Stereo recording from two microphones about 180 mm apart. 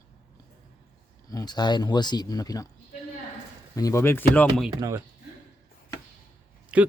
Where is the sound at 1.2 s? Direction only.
20° left (ahead or behind).